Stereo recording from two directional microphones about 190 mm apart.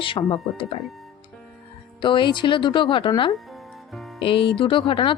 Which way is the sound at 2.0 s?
25° left (ahead or behind).